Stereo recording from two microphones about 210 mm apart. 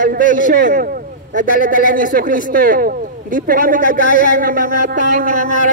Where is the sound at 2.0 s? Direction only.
40° right (ahead or behind).